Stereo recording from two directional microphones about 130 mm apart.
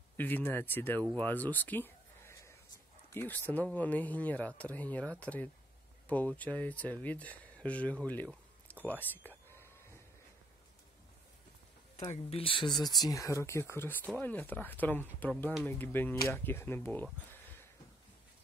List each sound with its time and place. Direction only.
0.2 s speech: 15° left (ahead or behind)
12.1 s speech: 50° left (ahead or behind)
12.7 s speech: centre (ahead or behind)
13.0 s speech: 25° left (ahead or behind)